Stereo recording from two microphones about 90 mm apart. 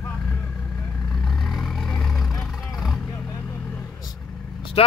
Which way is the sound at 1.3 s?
Centre (ahead or behind).